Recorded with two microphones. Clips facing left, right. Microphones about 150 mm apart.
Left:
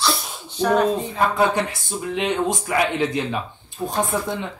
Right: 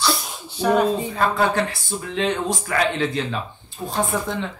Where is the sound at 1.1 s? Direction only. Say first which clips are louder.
Left 1 dB; 20° left (ahead or behind).